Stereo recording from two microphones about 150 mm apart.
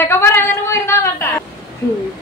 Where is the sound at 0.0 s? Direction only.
15° left (ahead or behind).